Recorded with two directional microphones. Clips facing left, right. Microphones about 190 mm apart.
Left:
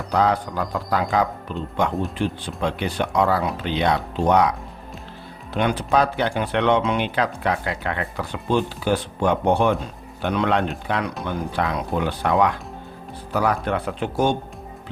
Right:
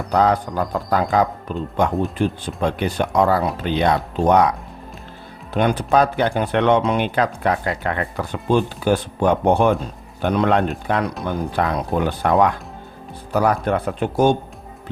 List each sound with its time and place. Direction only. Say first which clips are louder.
0.1 s speech: right 3 dB; 45° right (ahead or behind)
5.5 s speech: right 3 dB; 45° right (ahead or behind)